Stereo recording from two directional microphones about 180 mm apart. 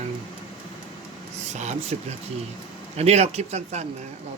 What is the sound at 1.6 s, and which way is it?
Speech, 40° right (ahead or behind).